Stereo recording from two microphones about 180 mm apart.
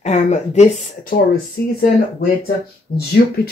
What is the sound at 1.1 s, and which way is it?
Speech, 55° left (ahead or behind).